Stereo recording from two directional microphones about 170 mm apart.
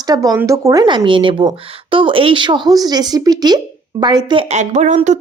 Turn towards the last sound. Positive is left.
turn(degrees=-45)  # may be behind; listen again after turning